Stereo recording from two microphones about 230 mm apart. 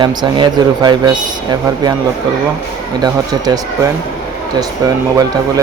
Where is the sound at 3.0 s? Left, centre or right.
Centre.